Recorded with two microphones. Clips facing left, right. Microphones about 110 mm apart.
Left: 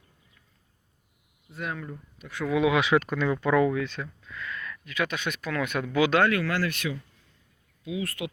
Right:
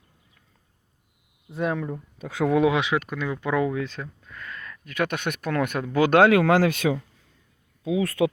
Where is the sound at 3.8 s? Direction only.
40° right (ahead or behind).